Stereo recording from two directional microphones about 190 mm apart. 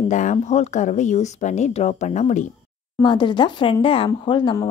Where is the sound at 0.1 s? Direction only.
40° left (ahead or behind).